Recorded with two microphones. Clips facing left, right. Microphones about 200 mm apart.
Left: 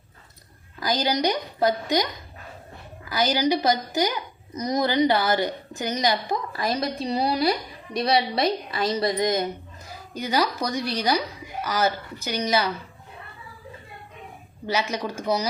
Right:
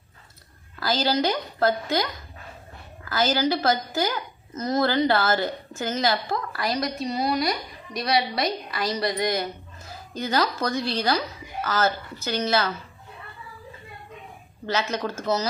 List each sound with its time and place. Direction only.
0.8 s a woman's voice: 15° left (ahead or behind)
14.7 s a woman's voice: 10° left (ahead or behind)